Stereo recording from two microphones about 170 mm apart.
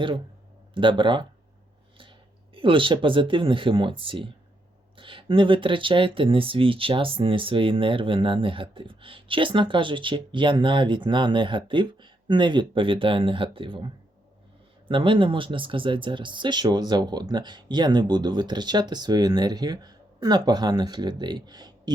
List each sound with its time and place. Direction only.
0.7 s speech: 30° right (ahead or behind)
2.6 s speech: 30° right (ahead or behind)